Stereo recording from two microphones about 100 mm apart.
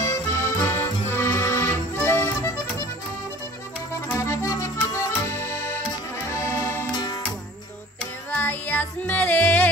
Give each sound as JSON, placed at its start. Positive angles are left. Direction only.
{"t": 0.0, "sound": "accordion", "side_deg": 30}
{"t": 4.2, "sound": "accordion", "side_deg": 30}
{"t": 6.9, "sound": "music", "side_deg": 45}
{"t": 8.3, "sound": "music", "side_deg": 15}